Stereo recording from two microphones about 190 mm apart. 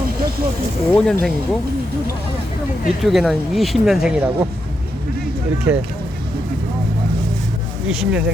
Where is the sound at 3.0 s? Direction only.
Centre (ahead or behind).